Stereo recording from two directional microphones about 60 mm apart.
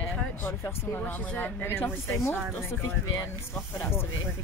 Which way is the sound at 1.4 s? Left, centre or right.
Left.